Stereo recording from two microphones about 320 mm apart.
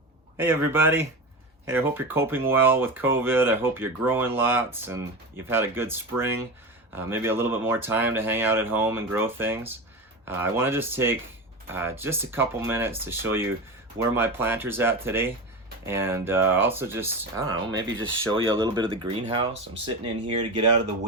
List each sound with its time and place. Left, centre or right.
0.3 s speech: centre